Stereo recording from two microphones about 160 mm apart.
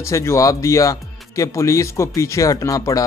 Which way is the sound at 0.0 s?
15° left (ahead or behind).